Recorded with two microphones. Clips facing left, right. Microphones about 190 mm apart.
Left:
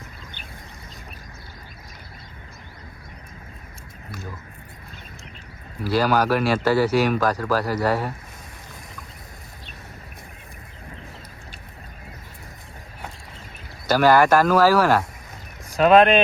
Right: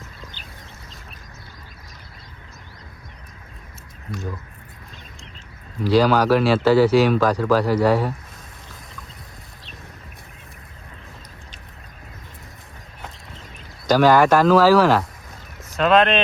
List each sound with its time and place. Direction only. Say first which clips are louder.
5.8 s speech: right 4 dB; 10° left (ahead or behind)
13.8 s speech: right 2 dB; 10° left (ahead or behind)